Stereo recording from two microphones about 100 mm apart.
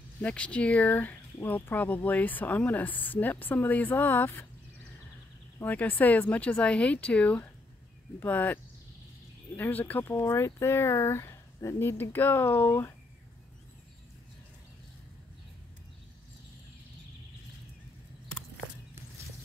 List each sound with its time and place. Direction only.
0.2 s speech: 10° left (ahead or behind)
5.6 s speech: 15° left (ahead or behind)
9.6 s speech: 15° left (ahead or behind)